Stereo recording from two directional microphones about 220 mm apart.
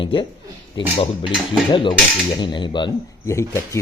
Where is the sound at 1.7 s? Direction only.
20° left (ahead or behind).